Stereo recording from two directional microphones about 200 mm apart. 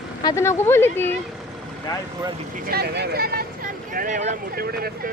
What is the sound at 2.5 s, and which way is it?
Speech, 50° right (ahead or behind).